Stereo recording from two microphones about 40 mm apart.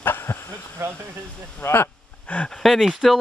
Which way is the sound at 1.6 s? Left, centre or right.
Left.